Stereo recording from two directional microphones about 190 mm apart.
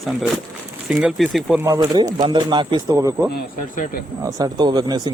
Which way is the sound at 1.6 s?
10° right (ahead or behind).